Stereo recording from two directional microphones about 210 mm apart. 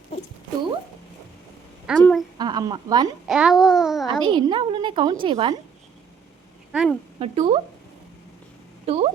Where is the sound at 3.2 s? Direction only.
5° right (ahead or behind).